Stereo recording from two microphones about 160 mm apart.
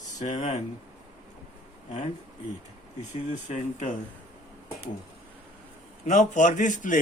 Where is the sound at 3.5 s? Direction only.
45° left (ahead or behind).